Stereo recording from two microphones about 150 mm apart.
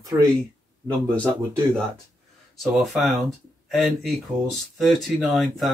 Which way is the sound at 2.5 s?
Centre (ahead or behind).